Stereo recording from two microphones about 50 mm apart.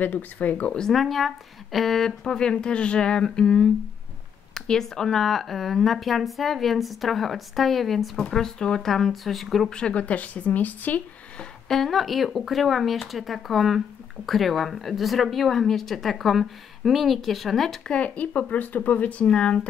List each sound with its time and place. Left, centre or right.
0.0 s speech: left
0.7 s speech: centre
9.7 s speech: centre; by 11.0 s left
11.3 s speech: centre
17.8 s speech: left